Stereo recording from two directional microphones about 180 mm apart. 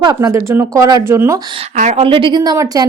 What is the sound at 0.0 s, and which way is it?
Speech, 20° right (ahead or behind).